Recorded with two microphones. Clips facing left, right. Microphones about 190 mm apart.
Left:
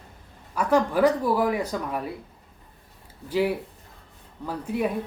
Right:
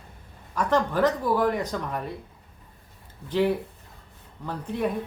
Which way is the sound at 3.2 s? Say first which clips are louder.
Right 1 dB; 10° left (ahead or behind).